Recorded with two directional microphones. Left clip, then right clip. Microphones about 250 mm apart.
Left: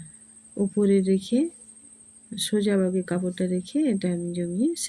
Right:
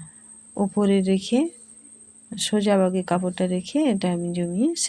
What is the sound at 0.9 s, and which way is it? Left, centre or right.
Speech, right.